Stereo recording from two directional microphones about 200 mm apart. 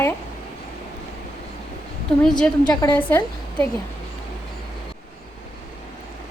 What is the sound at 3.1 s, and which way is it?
Speech, 10° left (ahead or behind).